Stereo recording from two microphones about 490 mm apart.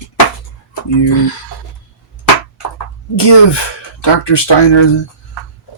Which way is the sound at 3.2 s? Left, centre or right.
Left.